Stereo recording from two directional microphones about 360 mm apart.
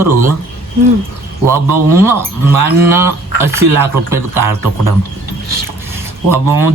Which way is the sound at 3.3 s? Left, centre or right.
Right.